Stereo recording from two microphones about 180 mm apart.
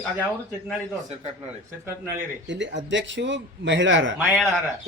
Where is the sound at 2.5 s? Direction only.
90° right.